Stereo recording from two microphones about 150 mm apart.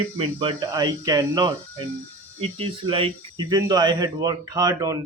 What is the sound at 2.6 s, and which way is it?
Speech, 35° right (ahead or behind).